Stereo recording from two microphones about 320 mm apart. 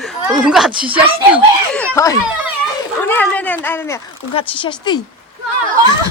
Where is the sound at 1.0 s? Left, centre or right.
Centre.